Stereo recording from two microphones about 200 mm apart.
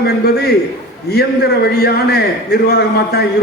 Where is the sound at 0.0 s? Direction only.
50° left (ahead or behind).